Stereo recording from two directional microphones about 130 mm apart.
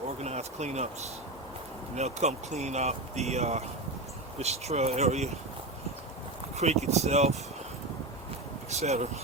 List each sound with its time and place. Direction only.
0.2 s speech: 60° right (ahead or behind)
6.6 s speech: 60° right (ahead or behind)
8.7 s speech: 55° right (ahead or behind)